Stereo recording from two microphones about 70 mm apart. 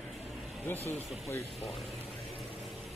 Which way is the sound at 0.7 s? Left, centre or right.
Left.